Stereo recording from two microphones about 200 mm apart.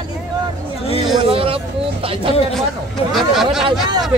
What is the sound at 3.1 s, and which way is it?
Speech, centre (ahead or behind).